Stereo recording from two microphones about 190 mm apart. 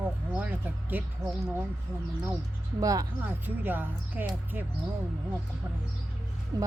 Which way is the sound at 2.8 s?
15° right (ahead or behind).